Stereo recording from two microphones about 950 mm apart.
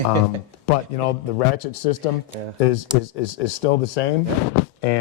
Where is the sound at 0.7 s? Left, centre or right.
Left.